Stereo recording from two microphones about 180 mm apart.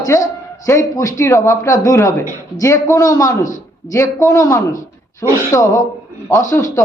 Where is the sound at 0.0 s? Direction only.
20° left (ahead or behind).